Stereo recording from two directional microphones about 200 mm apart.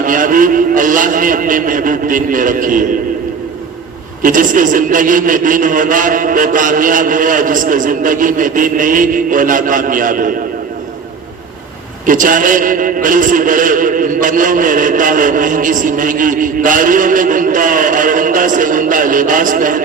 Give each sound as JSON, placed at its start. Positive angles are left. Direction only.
{"t": 0.0, "sound": "a man's voice", "side_deg": -40}
{"t": 4.2, "sound": "a man's voice", "side_deg": -40}
{"t": 12.0, "sound": "a man's voice", "side_deg": -40}